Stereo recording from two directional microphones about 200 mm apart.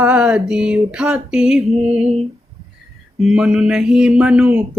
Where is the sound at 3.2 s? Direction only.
5° right (ahead or behind).